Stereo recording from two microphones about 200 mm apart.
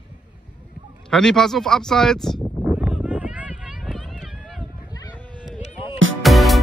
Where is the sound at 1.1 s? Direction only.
5° left (ahead or behind).